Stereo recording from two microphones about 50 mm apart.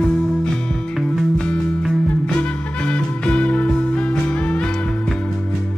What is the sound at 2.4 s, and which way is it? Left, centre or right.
Music, left.